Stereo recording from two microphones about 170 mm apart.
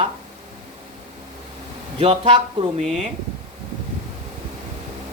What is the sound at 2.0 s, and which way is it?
Speech, 35° right (ahead or behind).